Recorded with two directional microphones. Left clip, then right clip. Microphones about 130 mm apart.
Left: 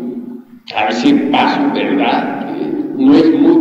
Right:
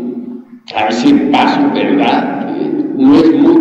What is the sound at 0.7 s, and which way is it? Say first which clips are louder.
A man's voice: right 2 dB; 30° left (ahead or behind).